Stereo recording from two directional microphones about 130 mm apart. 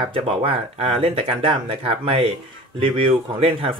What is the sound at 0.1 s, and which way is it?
Speech, 45° right (ahead or behind).